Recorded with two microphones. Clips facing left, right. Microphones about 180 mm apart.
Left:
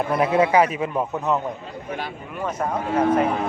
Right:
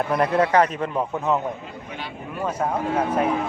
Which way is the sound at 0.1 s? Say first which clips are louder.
Left 1 dB; 5° left (ahead or behind).